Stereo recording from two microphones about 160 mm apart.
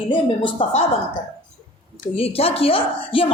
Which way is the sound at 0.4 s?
40° left (ahead or behind).